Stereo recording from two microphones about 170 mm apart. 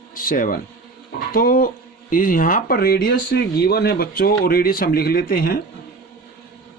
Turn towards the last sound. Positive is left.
turn(degrees=60)  # may be behind; listen again after turning